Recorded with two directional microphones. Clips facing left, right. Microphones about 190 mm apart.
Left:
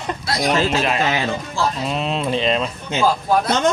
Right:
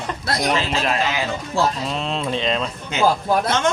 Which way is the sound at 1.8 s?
5° left (ahead or behind).